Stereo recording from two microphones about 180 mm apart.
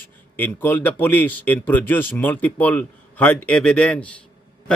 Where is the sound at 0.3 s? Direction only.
10° left (ahead or behind).